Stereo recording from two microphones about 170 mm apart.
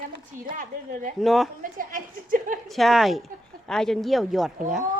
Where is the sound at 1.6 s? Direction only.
55° right (ahead or behind).